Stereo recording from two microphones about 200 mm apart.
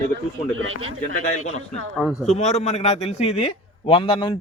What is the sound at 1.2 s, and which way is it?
A man's voice, 35° left (ahead or behind).